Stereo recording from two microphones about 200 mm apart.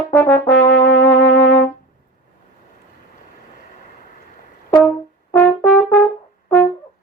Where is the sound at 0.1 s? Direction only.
10° left (ahead or behind).